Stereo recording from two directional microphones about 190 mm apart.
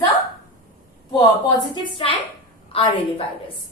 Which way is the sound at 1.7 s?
25° left (ahead or behind).